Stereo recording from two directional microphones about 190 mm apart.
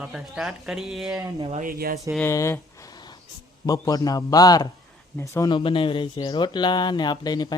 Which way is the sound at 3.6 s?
20° left (ahead or behind).